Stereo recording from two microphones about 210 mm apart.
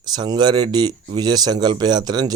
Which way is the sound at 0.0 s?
20° right (ahead or behind).